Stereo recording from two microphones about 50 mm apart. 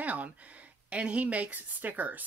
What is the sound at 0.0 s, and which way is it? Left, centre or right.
Speech, right.